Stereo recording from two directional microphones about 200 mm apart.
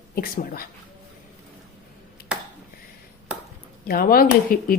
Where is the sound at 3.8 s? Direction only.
45° left (ahead or behind).